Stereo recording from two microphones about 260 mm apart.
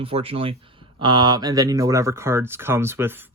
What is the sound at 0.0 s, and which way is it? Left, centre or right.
Speech, right.